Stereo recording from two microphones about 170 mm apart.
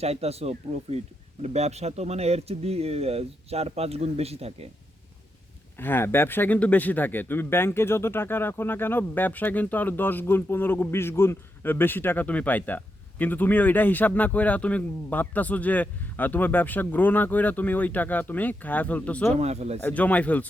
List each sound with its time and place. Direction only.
0.0 s a man's voice: 35° right (ahead or behind)
5.7 s speech: 10° left (ahead or behind)
19.4 s a man's voice: 40° right (ahead or behind)
19.8 s speech: 10° left (ahead or behind)